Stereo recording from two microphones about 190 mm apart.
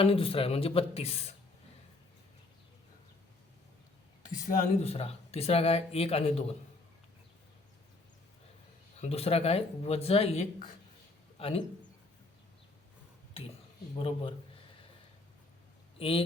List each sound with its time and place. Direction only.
0.0 s speech: 30° left (ahead or behind)
4.4 s speech: 30° left (ahead or behind)
9.0 s a man's voice: 30° left (ahead or behind)
13.9 s a man's voice: 30° left (ahead or behind)
16.0 s a man's voice: 30° left (ahead or behind)